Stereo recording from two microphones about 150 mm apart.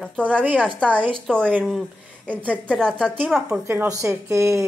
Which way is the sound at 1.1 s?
5° left (ahead or behind).